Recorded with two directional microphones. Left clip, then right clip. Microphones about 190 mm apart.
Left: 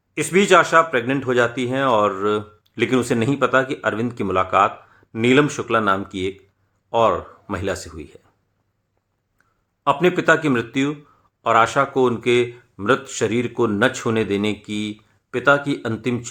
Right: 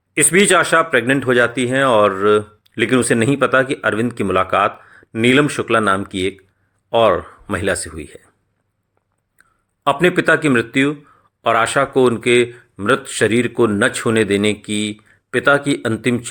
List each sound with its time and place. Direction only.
0.1 s speech: 20° right (ahead or behind)
9.8 s speech: 15° right (ahead or behind)